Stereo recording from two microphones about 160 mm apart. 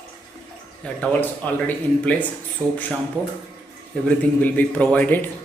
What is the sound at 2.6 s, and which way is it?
Speech, 10° right (ahead or behind).